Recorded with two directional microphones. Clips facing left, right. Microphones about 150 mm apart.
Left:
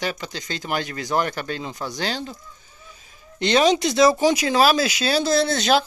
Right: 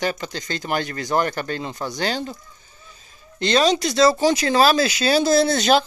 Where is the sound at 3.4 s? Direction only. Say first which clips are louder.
Left 1 dB; 15° left (ahead or behind); by 5.8 s centre (ahead or behind).